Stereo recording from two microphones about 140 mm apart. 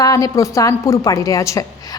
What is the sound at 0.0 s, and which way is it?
A woman's voice, 25° left (ahead or behind).